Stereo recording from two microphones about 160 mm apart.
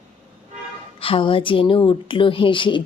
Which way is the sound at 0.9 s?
35° left (ahead or behind).